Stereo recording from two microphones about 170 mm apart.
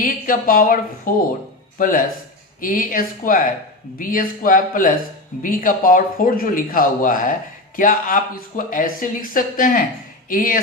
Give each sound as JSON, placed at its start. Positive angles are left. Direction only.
{"t": 0.0, "sound": "speech", "side_deg": 55}